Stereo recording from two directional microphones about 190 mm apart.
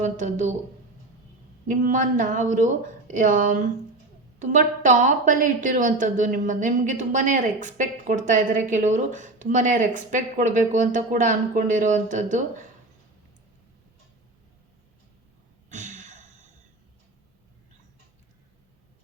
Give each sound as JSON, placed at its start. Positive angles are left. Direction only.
{"t": 0.0, "sound": "a woman's voice", "side_deg": -40}
{"t": 1.6, "sound": "a woman's voice", "side_deg": -45}
{"t": 15.7, "sound": "a sound", "side_deg": -40}